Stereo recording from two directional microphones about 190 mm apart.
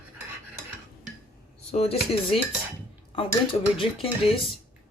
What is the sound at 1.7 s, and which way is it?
Speech, 30° left (ahead or behind).